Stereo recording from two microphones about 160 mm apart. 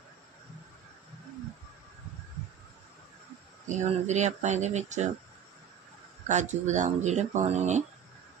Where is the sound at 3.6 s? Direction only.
45° right (ahead or behind).